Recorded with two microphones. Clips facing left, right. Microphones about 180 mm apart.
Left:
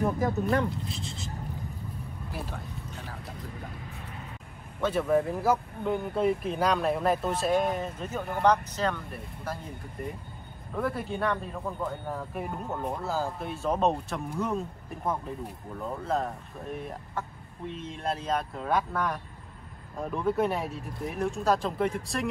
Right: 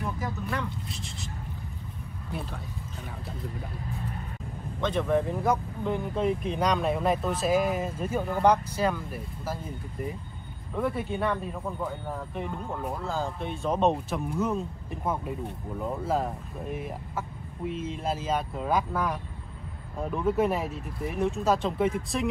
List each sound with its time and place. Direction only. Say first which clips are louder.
0.4 s speech: left 8 dB; 40° left (ahead or behind)
0.8 s speech: left 2 dB; 25° left (ahead or behind)
4.8 s speech: left 1 dB; 5° left (ahead or behind)
10.7 s speech: right 2 dB; centre (ahead or behind)
15.8 s speech: right 2 dB; 5° right (ahead or behind)